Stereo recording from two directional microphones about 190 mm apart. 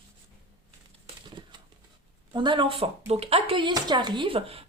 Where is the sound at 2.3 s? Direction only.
25° right (ahead or behind).